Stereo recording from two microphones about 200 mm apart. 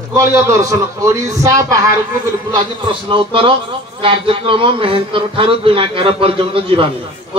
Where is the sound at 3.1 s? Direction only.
25° right (ahead or behind).